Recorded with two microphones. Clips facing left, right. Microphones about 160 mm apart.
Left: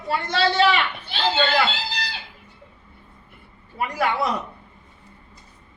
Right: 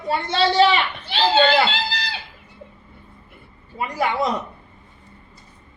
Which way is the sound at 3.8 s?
15° right (ahead or behind).